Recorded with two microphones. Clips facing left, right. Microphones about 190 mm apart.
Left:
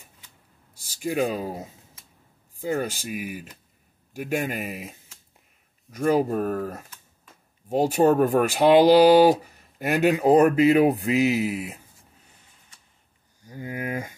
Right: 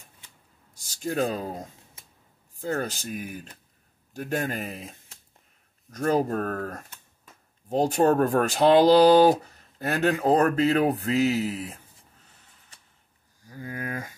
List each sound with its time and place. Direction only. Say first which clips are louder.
0.7 s speech: left 2 dB; 10° left (ahead or behind)
13.5 s speech: left 3 dB; 20° left (ahead or behind)